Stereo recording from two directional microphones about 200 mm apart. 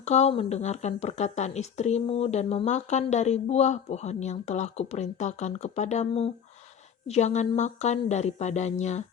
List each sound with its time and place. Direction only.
0.0 s speech: 35° left (ahead or behind)